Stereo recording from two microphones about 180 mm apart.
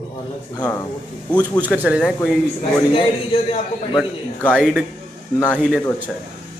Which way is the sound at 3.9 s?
5° left (ahead or behind).